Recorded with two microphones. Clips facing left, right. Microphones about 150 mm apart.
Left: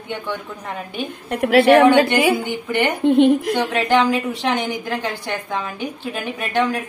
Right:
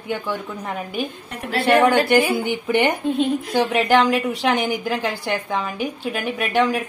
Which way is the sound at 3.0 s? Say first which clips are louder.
Left 7 dB; 70° left (ahead or behind).